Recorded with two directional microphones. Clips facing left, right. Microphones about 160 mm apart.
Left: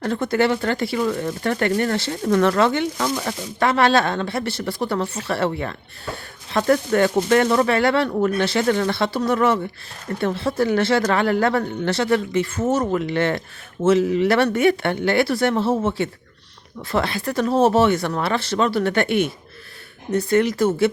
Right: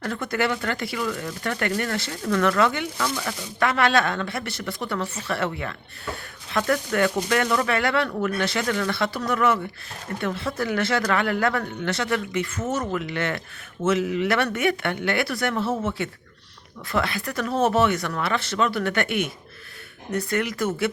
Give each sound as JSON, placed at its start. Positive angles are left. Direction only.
{"t": 0.0, "sound": "speech", "side_deg": 30}